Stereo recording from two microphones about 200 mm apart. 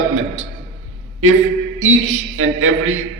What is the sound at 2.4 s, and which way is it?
Speech, 90° right.